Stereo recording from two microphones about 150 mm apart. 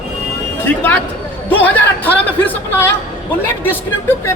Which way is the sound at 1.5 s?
10° left (ahead or behind).